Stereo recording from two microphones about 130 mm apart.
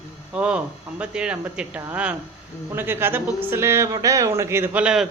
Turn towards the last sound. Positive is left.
turn(degrees=-5)  # may be behind; listen again after turning